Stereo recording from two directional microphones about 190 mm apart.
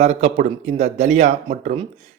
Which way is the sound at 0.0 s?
35° right (ahead or behind).